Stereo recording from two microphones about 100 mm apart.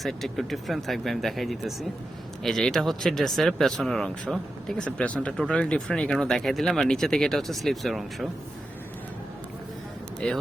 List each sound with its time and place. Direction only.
0.0 s speech: centre (ahead or behind)
10.2 s speech: 5° left (ahead or behind)